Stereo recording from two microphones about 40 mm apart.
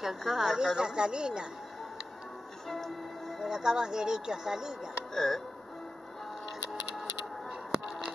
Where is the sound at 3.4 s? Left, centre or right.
Centre.